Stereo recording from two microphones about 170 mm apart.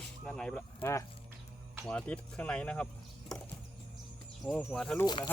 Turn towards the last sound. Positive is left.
turn(degrees=25)  # may be behind; listen again after turning